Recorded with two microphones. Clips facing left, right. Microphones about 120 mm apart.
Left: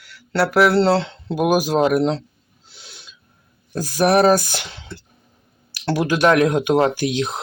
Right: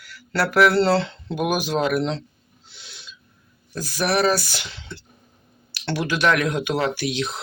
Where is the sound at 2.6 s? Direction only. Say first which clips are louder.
Left 1 dB; 40° left (ahead or behind).